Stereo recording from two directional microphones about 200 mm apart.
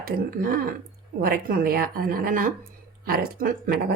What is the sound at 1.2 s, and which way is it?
Speech, 45° right (ahead or behind).